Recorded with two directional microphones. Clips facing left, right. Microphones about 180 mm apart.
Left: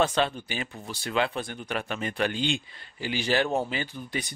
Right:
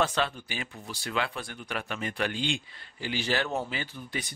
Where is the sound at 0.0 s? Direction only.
20° left (ahead or behind).